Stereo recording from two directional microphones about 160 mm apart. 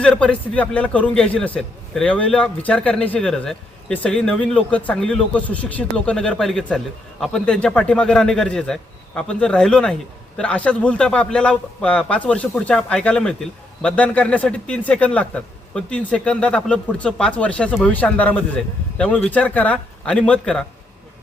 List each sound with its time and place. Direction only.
0.0 s a man's voice: 5° left (ahead or behind)